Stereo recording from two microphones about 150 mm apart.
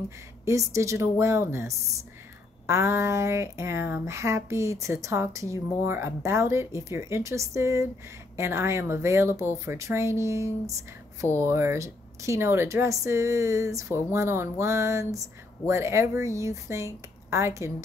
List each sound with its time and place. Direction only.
0.5 s a woman's voice: 20° right (ahead or behind)